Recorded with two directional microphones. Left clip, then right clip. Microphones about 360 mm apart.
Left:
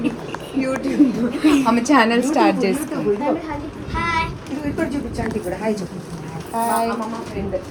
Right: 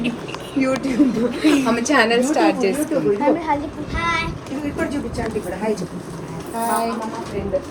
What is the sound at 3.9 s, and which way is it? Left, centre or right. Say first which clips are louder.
Speech: even; centre.